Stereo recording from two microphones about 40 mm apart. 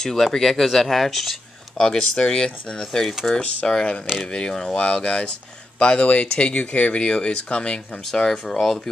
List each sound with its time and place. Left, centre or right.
0.0 s speech: centre
1.8 s speech: centre
8.1 s speech: centre